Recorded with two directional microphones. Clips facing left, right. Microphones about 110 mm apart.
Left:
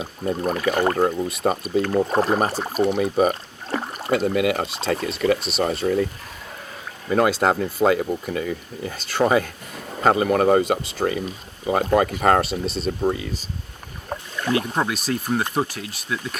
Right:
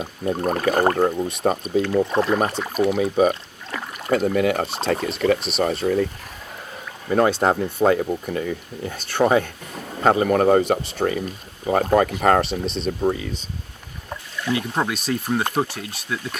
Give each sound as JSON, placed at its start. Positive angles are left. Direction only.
{"t": 0.3, "sound": "speech", "side_deg": -40}
{"t": 1.3, "sound": "speech", "side_deg": 0}
{"t": 2.0, "sound": "speech", "side_deg": 40}
{"t": 2.9, "sound": "speech", "side_deg": 0}
{"t": 3.7, "sound": "a sound", "side_deg": 35}
{"t": 4.1, "sound": "speech", "side_deg": 5}
{"t": 7.1, "sound": "speech", "side_deg": 0}
{"t": 14.1, "sound": "rowboat", "side_deg": 50}
{"t": 14.8, "sound": "speech", "side_deg": 0}